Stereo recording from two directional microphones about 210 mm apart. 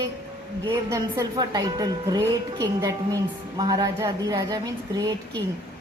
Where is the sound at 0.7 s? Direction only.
15° right (ahead or behind).